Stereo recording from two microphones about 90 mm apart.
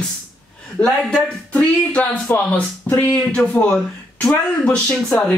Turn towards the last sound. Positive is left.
turn(degrees=10)  # may be behind; listen again after turning